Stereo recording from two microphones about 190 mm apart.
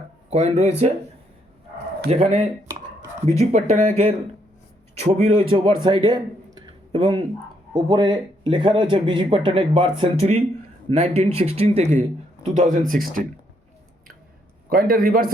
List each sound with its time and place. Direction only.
0.3 s a man's voice: 35° right (ahead or behind)
2.0 s a man's voice: 35° right (ahead or behind)
4.9 s speech: 35° right (ahead or behind)
6.7 s a sound: 30° right (ahead or behind)
7.7 s a man's voice: 20° right (ahead or behind); by 13.2 s 45° right (ahead or behind)
14.7 s a man's voice: 50° right (ahead or behind)